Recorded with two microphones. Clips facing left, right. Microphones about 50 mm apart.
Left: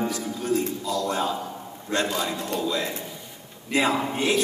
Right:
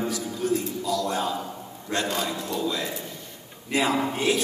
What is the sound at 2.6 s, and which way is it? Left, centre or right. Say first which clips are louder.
A man's voice: left 1 dB; left.